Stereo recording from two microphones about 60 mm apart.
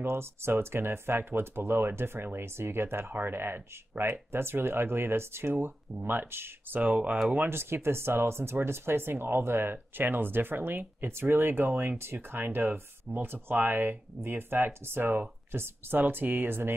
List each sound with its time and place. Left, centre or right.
0.0 s speech: right